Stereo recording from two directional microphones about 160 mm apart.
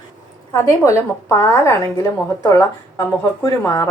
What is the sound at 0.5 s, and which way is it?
A woman's voice, 20° left (ahead or behind).